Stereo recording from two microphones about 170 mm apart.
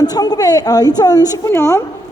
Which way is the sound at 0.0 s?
25° left (ahead or behind).